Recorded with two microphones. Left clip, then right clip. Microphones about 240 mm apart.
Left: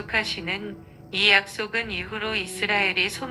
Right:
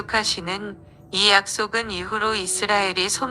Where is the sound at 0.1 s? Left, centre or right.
Right.